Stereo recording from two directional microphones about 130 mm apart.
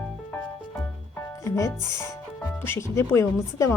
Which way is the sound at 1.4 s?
25° left (ahead or behind).